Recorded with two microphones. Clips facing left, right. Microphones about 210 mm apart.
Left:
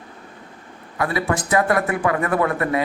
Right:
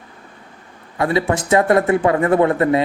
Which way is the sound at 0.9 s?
25° right (ahead or behind).